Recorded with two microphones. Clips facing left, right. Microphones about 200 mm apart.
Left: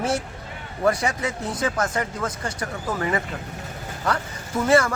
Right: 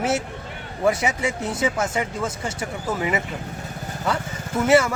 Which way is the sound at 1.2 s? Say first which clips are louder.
Right 2 dB; 25° right (ahead or behind).